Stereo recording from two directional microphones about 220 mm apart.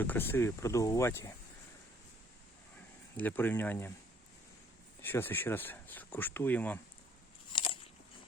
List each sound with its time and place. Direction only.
0.0 s speech: 10° left (ahead or behind)
3.2 s speech: 10° left (ahead or behind)
5.0 s speech: 10° left (ahead or behind)
7.5 s biting: 25° left (ahead or behind)